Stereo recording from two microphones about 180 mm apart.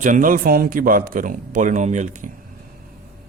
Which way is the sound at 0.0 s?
50° right (ahead or behind).